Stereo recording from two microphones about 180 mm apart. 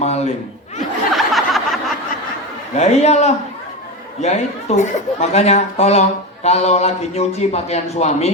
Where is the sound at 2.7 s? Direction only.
35° left (ahead or behind).